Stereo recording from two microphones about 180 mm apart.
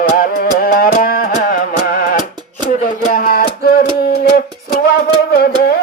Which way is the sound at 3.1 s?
55° left (ahead or behind).